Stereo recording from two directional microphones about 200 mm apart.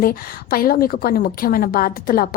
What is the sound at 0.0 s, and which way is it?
A woman's voice, 45° left (ahead or behind).